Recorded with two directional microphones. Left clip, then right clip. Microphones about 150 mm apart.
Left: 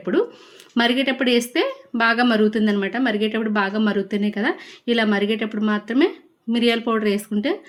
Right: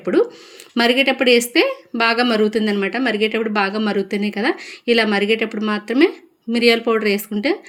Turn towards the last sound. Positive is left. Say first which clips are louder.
# right 3 dB
turn(degrees=-15)  # may be behind; listen again after turning